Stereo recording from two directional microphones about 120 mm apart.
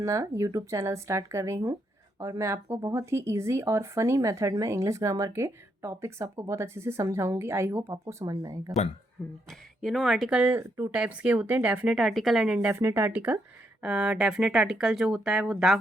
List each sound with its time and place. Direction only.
0.0 s speech: 25° right (ahead or behind)
8.2 s speech: 35° right (ahead or behind)
9.5 s speech: centre (ahead or behind)
11.9 s speech: centre (ahead or behind)
12.6 s speech: 20° right (ahead or behind); by 15.8 s centre (ahead or behind)